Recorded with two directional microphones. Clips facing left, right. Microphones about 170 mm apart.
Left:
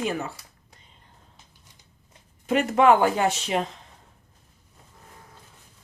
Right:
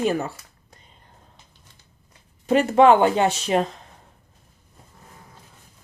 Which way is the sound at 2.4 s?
35° right (ahead or behind).